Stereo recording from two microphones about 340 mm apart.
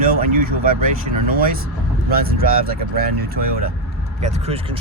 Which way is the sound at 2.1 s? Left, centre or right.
Right.